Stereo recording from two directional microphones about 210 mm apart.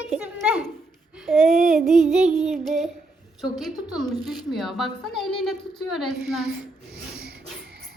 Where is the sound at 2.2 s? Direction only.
30° right (ahead or behind).